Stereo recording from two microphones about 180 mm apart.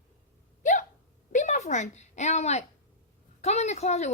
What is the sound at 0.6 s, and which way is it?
Hiccup, 45° left (ahead or behind).